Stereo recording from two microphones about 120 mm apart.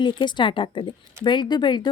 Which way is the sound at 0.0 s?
40° left (ahead or behind).